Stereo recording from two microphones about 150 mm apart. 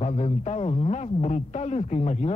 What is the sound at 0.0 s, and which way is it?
A man's voice, 45° left (ahead or behind).